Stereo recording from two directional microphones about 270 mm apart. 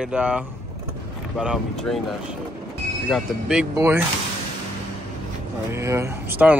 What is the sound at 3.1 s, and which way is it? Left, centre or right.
Speech, centre.